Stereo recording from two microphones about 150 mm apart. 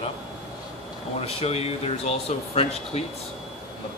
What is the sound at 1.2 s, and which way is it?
Speech, 45° left (ahead or behind).